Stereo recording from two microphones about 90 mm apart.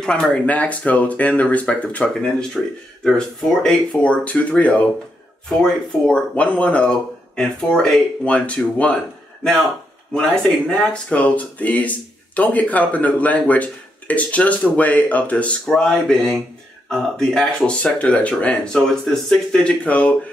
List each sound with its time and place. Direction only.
0.0 s speech: 10° left (ahead or behind)
2.6 s speech: centre (ahead or behind)
9.4 s speech: 5° left (ahead or behind)